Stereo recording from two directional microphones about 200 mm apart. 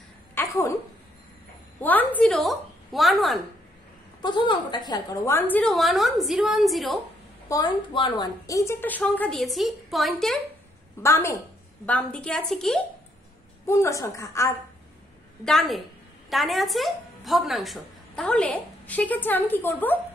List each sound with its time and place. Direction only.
0.4 s a sound: 10° left (ahead or behind)
1.8 s a woman's voice: 10° left (ahead or behind)
4.2 s a woman's voice: 25° left (ahead or behind); by 7.0 s centre (ahead or behind)
7.4 s a woman's voice: 20° left (ahead or behind); by 10.4 s centre (ahead or behind)
11.0 s a woman's voice: 15° left (ahead or behind)
13.7 s a woman's voice: 15° left (ahead or behind)
15.4 s a woman's voice: centre (ahead or behind)